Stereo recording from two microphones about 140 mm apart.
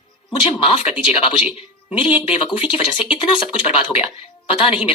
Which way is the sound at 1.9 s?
40° left (ahead or behind).